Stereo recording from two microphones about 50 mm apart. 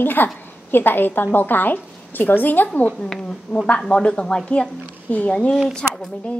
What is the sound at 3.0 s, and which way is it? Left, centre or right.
Speech, centre.